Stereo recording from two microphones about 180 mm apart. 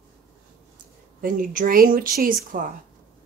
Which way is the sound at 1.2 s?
50° right (ahead or behind).